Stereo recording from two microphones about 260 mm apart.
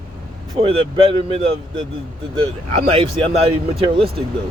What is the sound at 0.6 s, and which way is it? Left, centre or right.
Speech, right.